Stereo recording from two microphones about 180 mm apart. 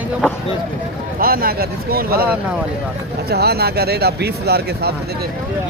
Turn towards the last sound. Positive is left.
turn(degrees=-60)  # may be behind; listen again after turning